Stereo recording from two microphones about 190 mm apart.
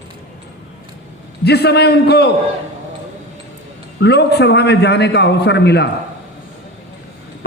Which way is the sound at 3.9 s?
60° left (ahead or behind).